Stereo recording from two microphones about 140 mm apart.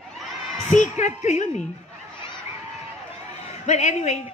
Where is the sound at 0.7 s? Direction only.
55° left (ahead or behind).